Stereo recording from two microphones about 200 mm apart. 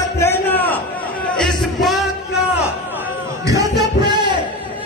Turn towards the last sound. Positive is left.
turn(degrees=-20)  # may be behind; listen again after turning